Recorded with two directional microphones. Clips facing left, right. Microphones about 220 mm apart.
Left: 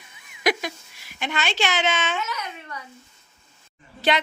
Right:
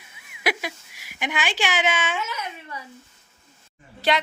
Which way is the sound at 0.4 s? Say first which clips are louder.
Left 3 dB; 10° right (ahead or behind).